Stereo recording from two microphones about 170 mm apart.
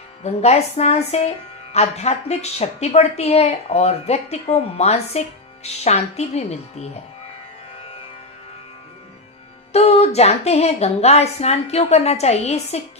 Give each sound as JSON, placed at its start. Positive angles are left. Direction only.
{"t": 0.2, "sound": "a woman's voice", "side_deg": 40}
{"t": 9.7, "sound": "a woman's voice", "side_deg": 40}